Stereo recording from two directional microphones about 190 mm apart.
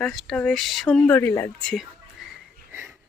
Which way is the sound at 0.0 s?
Centre (ahead or behind).